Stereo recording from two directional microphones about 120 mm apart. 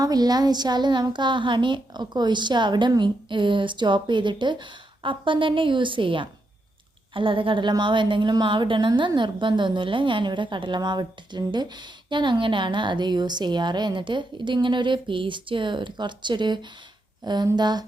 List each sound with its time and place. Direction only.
0.0 s a woman's voice: 35° right (ahead or behind)